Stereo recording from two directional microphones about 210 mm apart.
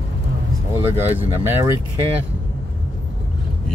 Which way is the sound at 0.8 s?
10° right (ahead or behind).